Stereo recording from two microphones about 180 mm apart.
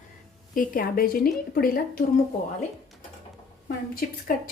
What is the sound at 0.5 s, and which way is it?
A woman's voice, 50° left (ahead or behind).